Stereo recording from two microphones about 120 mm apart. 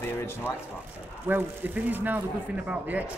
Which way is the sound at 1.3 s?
15° right (ahead or behind).